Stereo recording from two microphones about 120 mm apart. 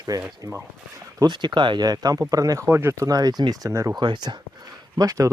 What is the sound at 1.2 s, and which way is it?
Speech, 40° right (ahead or behind).